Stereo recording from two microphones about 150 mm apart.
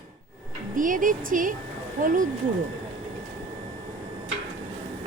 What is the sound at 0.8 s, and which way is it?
A woman's voice, 60° right (ahead or behind).